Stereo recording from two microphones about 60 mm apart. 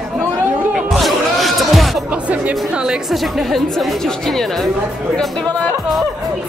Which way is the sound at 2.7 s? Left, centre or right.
Centre.